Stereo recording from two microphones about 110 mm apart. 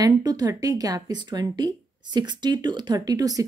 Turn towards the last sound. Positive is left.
turn(degrees=-35)  # may be behind; listen again after turning